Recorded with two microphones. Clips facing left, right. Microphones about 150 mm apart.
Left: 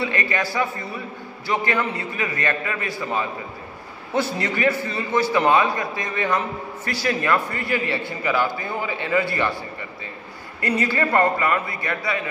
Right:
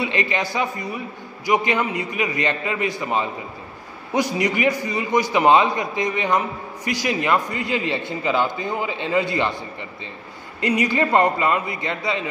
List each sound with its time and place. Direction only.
0.0 s a man's voice: 20° right (ahead or behind)
10.6 s a man's voice: 15° right (ahead or behind)